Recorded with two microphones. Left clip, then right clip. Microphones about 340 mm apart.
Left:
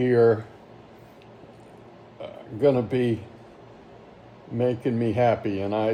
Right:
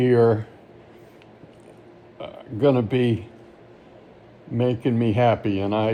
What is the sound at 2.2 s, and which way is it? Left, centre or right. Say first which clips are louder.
Speech: right 1 dB; right.